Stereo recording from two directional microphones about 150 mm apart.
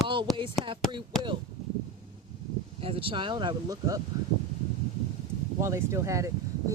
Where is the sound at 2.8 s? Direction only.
35° right (ahead or behind).